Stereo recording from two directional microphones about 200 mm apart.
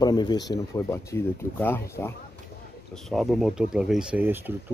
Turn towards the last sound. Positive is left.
turn(degrees=-10)  # may be behind; listen again after turning